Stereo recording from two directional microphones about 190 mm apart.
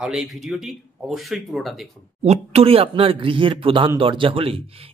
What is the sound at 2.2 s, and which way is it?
Speech, 35° right (ahead or behind).